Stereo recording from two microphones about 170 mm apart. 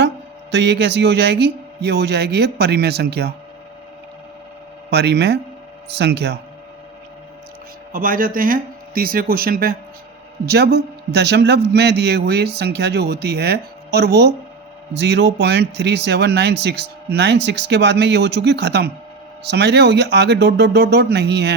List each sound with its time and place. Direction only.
0.5 s speech: 90° right; by 3.3 s 75° right (ahead or behind)
4.9 s a man's voice: 75° right (ahead or behind)
7.9 s speech: 55° right (ahead or behind)
10.4 s a man's voice: 75° right (ahead or behind)